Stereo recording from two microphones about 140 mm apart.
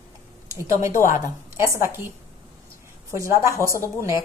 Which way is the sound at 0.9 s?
65° left (ahead or behind).